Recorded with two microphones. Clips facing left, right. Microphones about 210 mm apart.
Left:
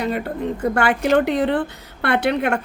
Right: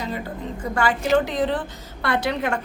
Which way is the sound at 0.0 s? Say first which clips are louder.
Left 6 dB; 65° left (ahead or behind).